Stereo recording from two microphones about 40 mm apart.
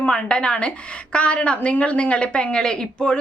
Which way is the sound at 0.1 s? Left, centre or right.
Left.